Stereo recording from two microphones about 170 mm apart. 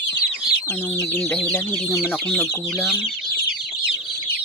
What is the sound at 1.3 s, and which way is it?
Speech, 15° left (ahead or behind).